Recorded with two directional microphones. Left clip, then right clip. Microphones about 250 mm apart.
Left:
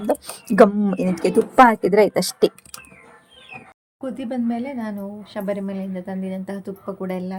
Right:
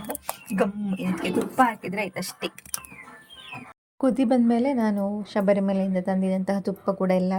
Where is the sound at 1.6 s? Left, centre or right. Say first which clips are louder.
Left 12 dB; left.